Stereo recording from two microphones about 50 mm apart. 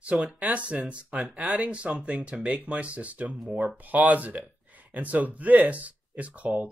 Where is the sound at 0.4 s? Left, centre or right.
Right.